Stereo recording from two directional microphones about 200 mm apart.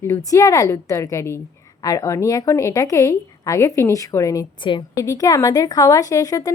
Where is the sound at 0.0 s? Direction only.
15° left (ahead or behind).